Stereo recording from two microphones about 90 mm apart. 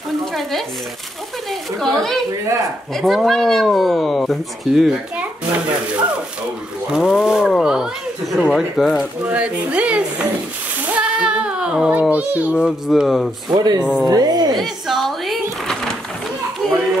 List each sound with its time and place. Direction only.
0.2 s stir: centre (ahead or behind)
1.5 s speech: 5° left (ahead or behind)
6.9 s speech: 5° right (ahead or behind)
9.2 s speech: 15° right (ahead or behind)
10.9 s a sound: 10° right (ahead or behind)
12.6 s speech: 5° right (ahead or behind)
13.5 s a woman's voice: 50° right (ahead or behind)
14.6 s a sound: centre (ahead or behind)